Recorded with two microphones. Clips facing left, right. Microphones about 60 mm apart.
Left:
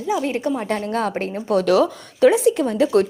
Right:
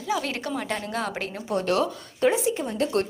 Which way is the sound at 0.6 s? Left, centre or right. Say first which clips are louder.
Left 7 dB; left.